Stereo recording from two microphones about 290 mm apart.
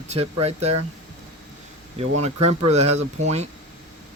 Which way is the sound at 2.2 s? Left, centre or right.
Right.